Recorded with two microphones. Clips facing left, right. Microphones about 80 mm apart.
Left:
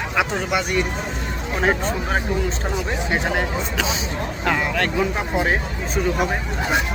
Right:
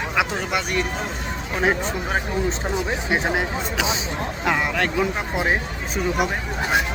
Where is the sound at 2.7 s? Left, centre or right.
Centre.